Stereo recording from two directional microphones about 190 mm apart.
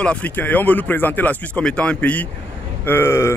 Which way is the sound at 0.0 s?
5° left (ahead or behind).